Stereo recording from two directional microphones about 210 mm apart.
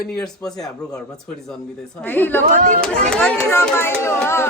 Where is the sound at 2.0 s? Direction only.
10° left (ahead or behind).